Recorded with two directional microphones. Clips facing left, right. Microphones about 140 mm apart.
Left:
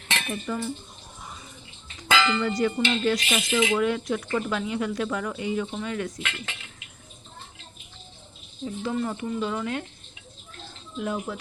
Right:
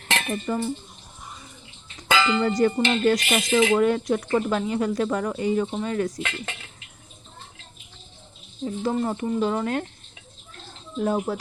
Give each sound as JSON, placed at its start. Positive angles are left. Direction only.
{"t": 0.1, "sound": "dishes", "side_deg": -45}
{"t": 2.4, "sound": "speech", "side_deg": -40}
{"t": 8.6, "sound": "speech", "side_deg": -40}
{"t": 10.9, "sound": "speech", "side_deg": -40}